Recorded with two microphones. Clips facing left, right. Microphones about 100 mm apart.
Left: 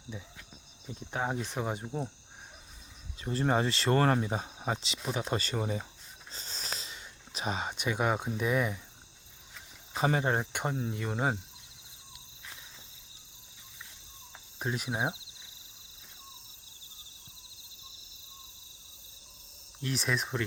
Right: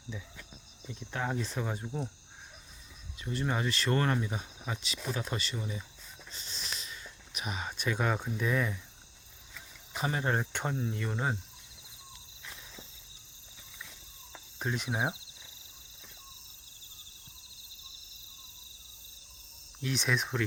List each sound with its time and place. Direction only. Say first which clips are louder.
1.1 s speech: left 1 dB; 20° left (ahead or behind)
3.2 s speech: left 5 dB; 35° left (ahead or behind)
5.4 s speech: left 6 dB; 45° left (ahead or behind)
6.3 s wheeze: left 3 dB; 35° left (ahead or behind); by 8.8 s 15° left (ahead or behind)
9.9 s cricket: left 5 dB; 30° left (ahead or behind)
10.2 s cricket: left 2 dB; 15° left (ahead or behind)
10.8 s speech: left 1 dB; 20° left (ahead or behind)
14.6 s cricket: even; 5° left (ahead or behind)
14.8 s cricket: even; 15° left (ahead or behind)
19.8 s cricket: even; centre (ahead or behind)